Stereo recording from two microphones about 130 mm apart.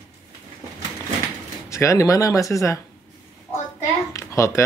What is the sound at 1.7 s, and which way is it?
Speech, 25° left (ahead or behind).